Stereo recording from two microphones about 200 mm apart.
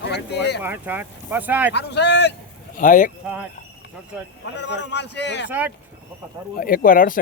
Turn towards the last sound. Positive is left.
turn(degrees=45)  # may be behind; listen again after turning